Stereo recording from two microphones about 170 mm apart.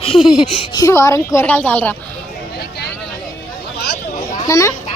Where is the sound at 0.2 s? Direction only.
Centre (ahead or behind).